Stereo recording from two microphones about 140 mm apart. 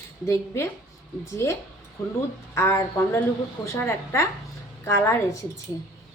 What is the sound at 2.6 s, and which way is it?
A woman's voice, 20° left (ahead or behind).